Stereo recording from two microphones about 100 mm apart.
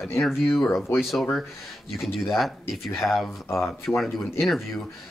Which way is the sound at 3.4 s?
25° left (ahead or behind).